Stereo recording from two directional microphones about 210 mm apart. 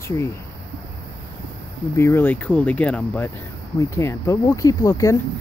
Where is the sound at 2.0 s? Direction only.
10° left (ahead or behind).